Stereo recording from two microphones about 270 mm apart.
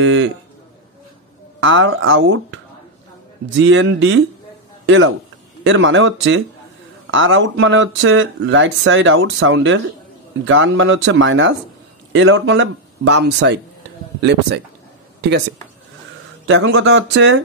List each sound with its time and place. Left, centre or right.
0.0 s speech: right
1.6 s a man's voice: right
16.4 s speech: right